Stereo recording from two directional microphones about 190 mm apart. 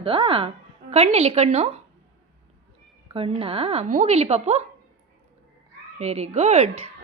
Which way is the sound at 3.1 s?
30° right (ahead or behind).